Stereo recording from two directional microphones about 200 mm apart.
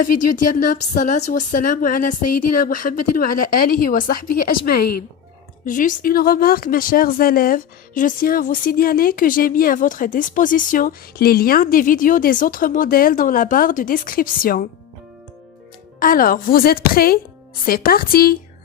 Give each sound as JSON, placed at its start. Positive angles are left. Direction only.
{"t": 0.0, "sound": "speech", "side_deg": 40}
{"t": 16.0, "sound": "speech", "side_deg": 45}